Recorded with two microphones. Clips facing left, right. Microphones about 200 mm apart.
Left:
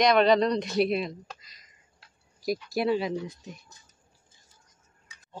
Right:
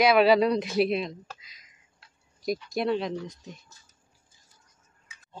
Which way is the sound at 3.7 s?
20° left (ahead or behind).